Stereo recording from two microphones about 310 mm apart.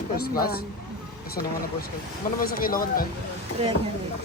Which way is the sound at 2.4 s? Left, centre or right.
Left.